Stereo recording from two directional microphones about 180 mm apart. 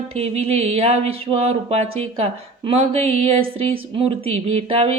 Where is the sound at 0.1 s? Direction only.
35° right (ahead or behind).